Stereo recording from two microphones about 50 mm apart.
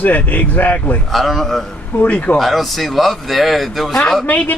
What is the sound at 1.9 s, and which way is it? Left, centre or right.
Speech, left.